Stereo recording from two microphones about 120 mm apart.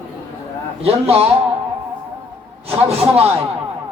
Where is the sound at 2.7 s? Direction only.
55° right (ahead or behind).